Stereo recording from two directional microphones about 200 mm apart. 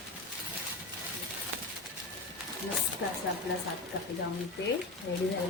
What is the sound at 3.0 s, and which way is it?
Speech, 70° left (ahead or behind).